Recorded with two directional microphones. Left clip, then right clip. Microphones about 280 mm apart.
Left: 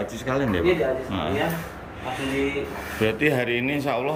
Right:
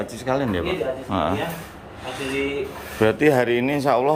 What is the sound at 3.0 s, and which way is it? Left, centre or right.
Speech, centre.